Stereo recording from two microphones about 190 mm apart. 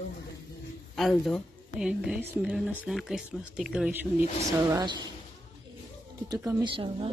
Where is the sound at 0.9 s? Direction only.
Centre (ahead or behind).